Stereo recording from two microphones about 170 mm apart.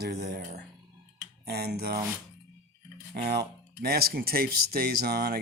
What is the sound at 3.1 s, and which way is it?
Speech, 70° right (ahead or behind).